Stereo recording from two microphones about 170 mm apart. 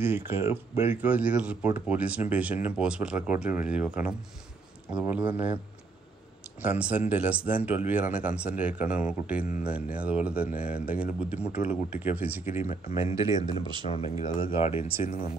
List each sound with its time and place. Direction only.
0.0 s speech: 15° right (ahead or behind)
6.6 s speech: 10° right (ahead or behind)
13.8 s speech: 35° left (ahead or behind)